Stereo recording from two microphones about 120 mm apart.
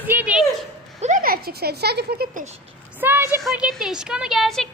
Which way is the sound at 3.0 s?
15° right (ahead or behind).